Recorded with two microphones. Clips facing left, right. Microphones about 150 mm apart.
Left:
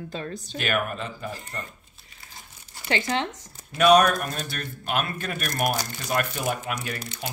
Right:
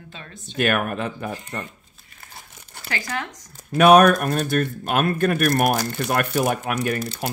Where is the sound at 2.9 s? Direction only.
25° left (ahead or behind).